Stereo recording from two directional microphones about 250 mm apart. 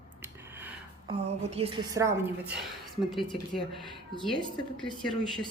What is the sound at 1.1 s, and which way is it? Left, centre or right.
A woman's voice, right.